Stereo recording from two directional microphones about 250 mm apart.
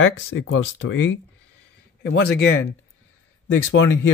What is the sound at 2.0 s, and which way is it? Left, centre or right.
Speech, left.